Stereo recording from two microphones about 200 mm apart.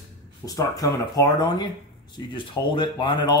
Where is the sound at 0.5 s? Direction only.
20° left (ahead or behind).